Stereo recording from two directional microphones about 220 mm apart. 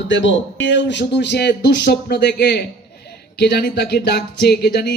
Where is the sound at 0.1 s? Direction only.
55° left (ahead or behind).